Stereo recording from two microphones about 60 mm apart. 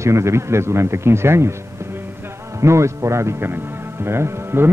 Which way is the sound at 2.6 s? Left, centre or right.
Right.